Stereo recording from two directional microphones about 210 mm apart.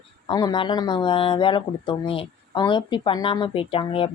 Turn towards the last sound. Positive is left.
turn(degrees=25)  # may be behind; listen again after turning